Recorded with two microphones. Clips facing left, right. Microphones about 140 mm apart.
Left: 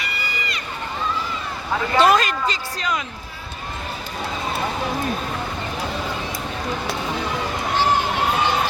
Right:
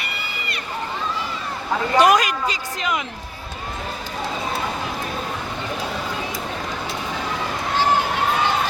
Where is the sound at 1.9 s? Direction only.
15° right (ahead or behind).